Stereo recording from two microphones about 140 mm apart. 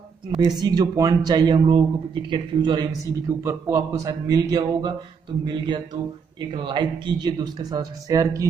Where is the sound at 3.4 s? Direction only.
15° right (ahead or behind).